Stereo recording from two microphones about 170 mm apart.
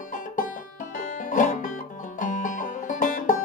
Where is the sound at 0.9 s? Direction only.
50° left (ahead or behind).